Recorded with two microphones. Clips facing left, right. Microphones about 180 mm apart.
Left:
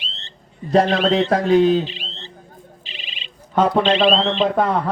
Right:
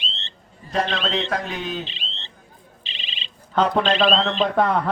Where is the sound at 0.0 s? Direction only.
20° right (ahead or behind).